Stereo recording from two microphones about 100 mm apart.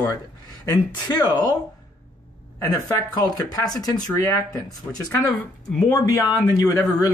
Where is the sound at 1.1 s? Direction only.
40° left (ahead or behind).